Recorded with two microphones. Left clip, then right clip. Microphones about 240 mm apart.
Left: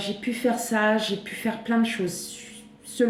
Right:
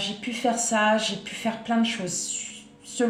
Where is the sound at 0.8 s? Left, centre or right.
Centre.